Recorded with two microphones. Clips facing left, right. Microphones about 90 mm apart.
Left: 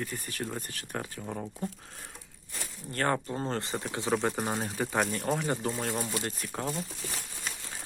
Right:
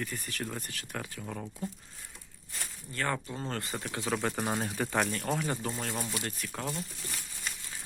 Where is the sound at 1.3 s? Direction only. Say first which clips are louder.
Left 3 dB; 20° left (ahead or behind).